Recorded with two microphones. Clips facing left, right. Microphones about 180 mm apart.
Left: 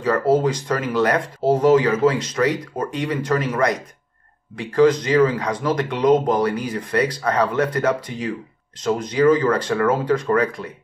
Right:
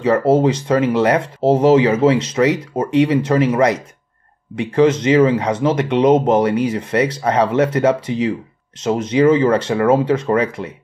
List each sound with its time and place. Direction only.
0.0 s speech: 25° right (ahead or behind)